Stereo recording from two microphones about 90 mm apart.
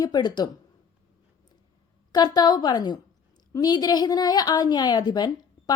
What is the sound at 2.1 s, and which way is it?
A woman's voice, 45° left (ahead or behind).